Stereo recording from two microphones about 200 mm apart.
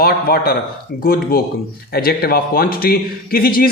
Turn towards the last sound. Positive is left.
turn(degrees=45)  # may be behind; listen again after turning